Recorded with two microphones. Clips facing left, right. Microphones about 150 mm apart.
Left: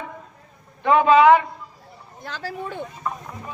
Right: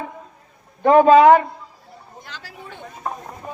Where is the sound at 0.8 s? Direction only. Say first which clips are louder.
Right 4 dB; 40° right (ahead or behind).